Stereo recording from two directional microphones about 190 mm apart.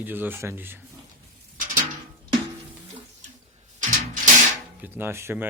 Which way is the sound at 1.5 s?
40° right (ahead or behind).